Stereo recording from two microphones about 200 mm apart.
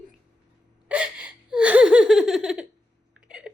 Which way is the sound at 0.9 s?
5° right (ahead or behind).